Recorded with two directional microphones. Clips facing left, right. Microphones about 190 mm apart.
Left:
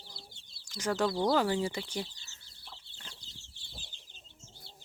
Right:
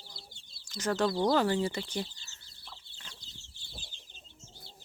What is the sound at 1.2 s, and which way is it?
Speech, 5° left (ahead or behind).